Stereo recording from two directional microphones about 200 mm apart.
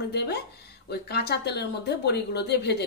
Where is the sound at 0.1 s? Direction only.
55° left (ahead or behind).